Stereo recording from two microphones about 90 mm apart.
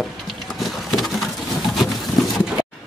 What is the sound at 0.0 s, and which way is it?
Printer, centre (ahead or behind).